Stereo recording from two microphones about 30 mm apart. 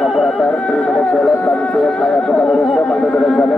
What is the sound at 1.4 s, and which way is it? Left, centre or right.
Music, left.